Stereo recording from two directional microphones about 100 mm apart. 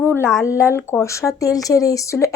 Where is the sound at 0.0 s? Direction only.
25° left (ahead or behind).